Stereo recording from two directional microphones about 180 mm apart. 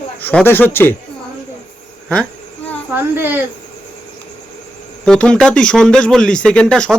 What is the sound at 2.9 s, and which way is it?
Speech, 10° right (ahead or behind).